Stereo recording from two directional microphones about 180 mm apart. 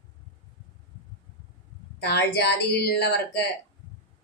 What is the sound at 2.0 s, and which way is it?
Speech, 65° left (ahead or behind).